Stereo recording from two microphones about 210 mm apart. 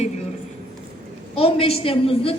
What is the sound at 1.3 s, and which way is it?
A woman's voice, 25° left (ahead or behind).